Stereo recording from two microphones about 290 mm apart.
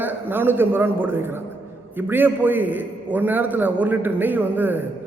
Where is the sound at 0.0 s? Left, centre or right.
Centre.